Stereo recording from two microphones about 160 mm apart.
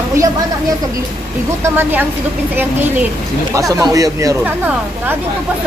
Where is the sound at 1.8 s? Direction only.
10° right (ahead or behind).